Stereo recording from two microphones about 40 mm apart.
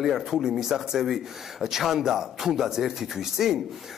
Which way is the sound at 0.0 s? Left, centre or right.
Centre.